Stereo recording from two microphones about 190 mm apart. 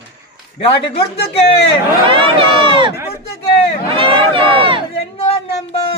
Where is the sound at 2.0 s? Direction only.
25° right (ahead or behind).